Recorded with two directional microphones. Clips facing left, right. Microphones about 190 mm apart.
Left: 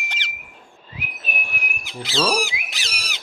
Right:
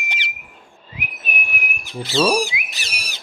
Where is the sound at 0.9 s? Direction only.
15° right (ahead or behind).